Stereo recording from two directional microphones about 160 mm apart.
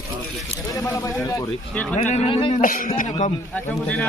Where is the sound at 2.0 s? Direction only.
45° left (ahead or behind).